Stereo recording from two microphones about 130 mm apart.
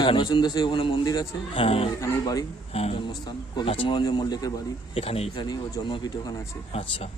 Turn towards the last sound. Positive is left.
turn(degrees=50)  # may be behind; listen again after turning